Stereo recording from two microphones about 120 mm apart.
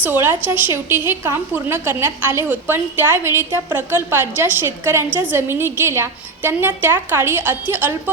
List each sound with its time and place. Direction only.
0.0 s a woman's voice: 15° right (ahead or behind)